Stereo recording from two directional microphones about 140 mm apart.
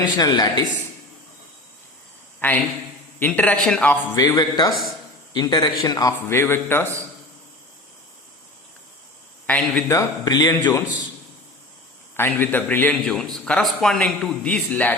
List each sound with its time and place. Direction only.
0.0 s a man's voice: 25° left (ahead or behind)
2.4 s a man's voice: 15° left (ahead or behind)
4.1 s a man's voice: 25° left (ahead or behind)
4.7 s a man's voice: centre (ahead or behind)
5.3 s a man's voice: 30° left (ahead or behind)
9.5 s a man's voice: 5° left (ahead or behind)
9.9 s a man's voice: 25° left (ahead or behind)
12.1 s a man's voice: 15° left (ahead or behind)